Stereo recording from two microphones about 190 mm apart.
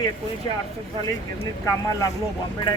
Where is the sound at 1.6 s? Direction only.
15° left (ahead or behind).